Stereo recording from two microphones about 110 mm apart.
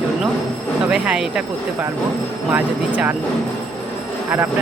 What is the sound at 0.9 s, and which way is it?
Speech, 10° right (ahead or behind).